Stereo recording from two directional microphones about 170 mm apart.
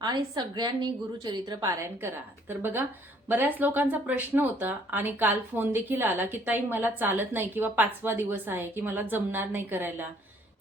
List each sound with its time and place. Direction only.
0.0 s a woman's voice: 25° right (ahead or behind)